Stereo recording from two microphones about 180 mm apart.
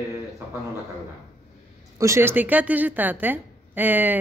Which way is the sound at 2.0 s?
15° right (ahead or behind).